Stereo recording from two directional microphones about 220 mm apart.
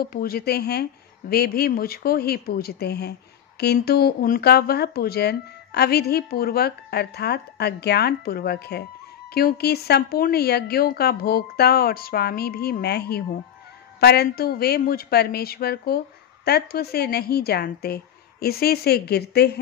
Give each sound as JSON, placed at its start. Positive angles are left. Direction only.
{"t": 0.0, "sound": "speech", "side_deg": 45}